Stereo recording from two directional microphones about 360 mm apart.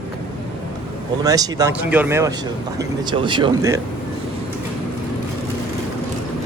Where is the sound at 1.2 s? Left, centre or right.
Centre.